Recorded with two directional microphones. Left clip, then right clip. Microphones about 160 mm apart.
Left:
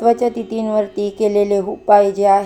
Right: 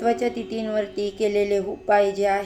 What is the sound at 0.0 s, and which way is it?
A woman's voice, 15° left (ahead or behind).